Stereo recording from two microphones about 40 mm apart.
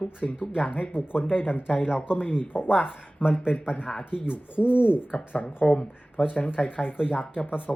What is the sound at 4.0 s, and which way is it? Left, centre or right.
Speech, left.